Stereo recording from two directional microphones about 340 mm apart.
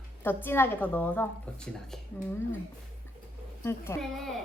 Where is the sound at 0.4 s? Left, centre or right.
Centre.